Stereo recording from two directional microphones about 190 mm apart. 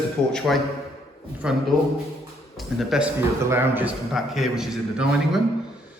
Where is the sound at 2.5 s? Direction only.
Centre (ahead or behind).